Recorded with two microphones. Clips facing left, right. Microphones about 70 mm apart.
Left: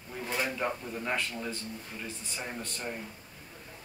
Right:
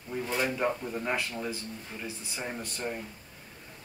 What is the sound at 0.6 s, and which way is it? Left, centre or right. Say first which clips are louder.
Speech: right 3 dB; centre.